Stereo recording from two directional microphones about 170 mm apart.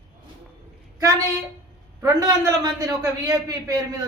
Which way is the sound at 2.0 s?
20° right (ahead or behind).